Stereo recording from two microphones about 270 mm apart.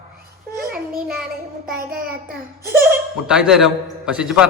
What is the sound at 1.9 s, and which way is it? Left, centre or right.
Child singing, right.